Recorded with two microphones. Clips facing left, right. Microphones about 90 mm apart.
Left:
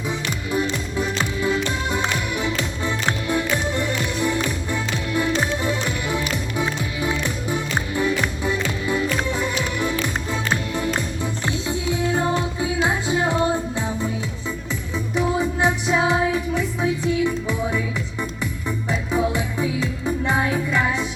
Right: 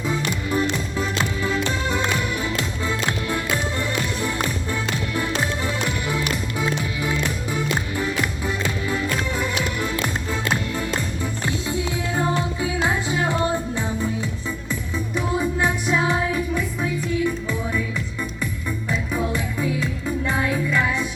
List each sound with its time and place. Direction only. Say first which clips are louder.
0.1 s music: right 1 dB; 15° left (ahead or behind)
13.1 s music: left 2 dB; 20° left (ahead or behind)
15.6 s music: left 4 dB; 20° left (ahead or behind)
18.9 s music: left 3 dB; 20° left (ahead or behind)